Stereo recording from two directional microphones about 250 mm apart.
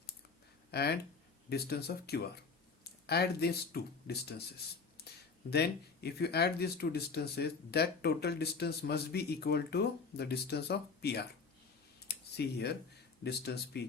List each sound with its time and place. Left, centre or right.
0.7 s speech: left
11.9 s a sound: left
13.2 s speech: left